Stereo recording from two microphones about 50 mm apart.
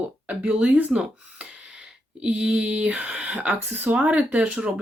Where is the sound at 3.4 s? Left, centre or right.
Right.